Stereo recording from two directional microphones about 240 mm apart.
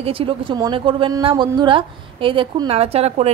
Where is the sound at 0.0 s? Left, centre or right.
Right.